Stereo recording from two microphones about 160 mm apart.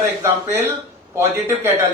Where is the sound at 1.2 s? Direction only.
15° right (ahead or behind).